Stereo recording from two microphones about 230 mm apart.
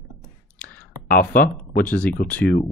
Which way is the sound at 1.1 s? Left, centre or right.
Left.